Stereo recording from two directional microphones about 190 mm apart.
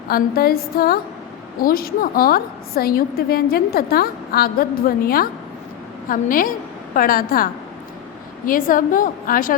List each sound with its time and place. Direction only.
0.1 s a woman's voice: 50° left (ahead or behind)